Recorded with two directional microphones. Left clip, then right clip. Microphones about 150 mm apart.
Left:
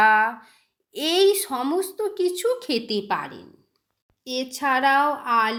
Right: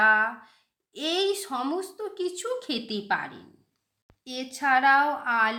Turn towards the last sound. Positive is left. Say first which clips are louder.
# left 3 dB
turn(degrees=15)  # may be behind; listen again after turning